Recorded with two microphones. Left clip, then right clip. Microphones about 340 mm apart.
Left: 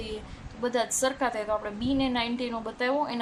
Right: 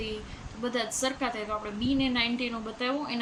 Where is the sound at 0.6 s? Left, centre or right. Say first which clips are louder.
Left 3 dB; centre.